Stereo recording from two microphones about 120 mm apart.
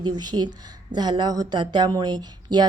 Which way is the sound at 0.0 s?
35° right (ahead or behind).